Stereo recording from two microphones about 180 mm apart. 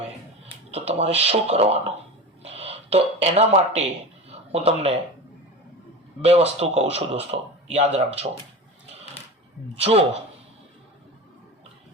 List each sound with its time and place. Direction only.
0.7 s speech: 35° right (ahead or behind)
6.2 s speech: 35° right (ahead or behind)